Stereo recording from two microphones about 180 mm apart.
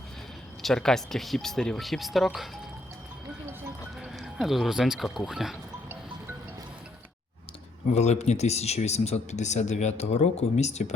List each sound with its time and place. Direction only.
0.6 s speech: 5° left (ahead or behind)
4.0 s speech: centre (ahead or behind)
7.9 s speech: 40° left (ahead or behind)